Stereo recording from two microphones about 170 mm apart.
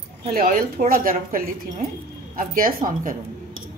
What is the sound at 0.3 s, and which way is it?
Speech, 55° right (ahead or behind).